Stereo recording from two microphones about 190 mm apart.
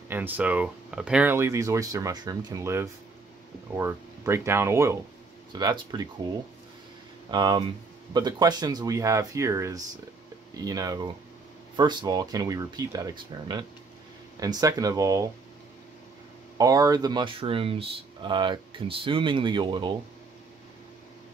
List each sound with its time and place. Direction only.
0.1 s speech: 10° right (ahead or behind)
7.2 s speech: 25° right (ahead or behind)
16.5 s speech: 20° right (ahead or behind)